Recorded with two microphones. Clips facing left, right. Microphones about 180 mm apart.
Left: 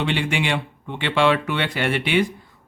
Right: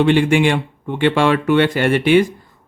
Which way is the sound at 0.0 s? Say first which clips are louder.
Right 10 dB; 45° right (ahead or behind).